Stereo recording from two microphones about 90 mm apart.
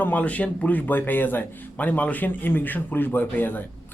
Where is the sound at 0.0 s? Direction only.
15° left (ahead or behind).